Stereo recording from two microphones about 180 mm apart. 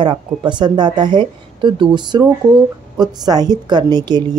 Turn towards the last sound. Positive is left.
turn(degrees=-25)  # may be behind; listen again after turning